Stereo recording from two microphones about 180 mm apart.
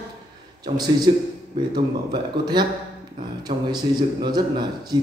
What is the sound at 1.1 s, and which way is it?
A man's voice, 25° right (ahead or behind).